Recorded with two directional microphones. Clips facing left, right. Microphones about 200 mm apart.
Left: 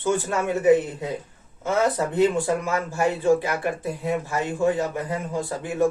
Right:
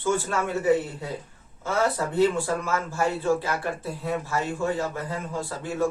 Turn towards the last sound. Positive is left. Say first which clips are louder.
# left 3 dB
turn(degrees=15)  # may be behind; listen again after turning